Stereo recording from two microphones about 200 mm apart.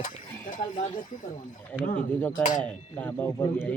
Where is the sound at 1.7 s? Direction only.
5° left (ahead or behind).